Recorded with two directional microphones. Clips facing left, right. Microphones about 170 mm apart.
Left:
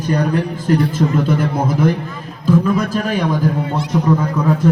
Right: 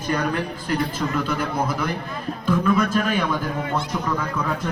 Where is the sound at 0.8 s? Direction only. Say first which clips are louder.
Left 7 dB; 50° left (ahead or behind).